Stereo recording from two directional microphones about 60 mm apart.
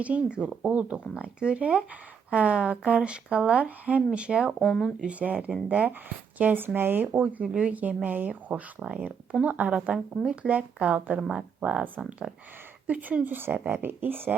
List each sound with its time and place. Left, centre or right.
0.0 s speech: right
4.6 s speech: centre
5.0 s speech: right
7.4 s speech: centre
11.2 s speech: centre
12.9 s speech: right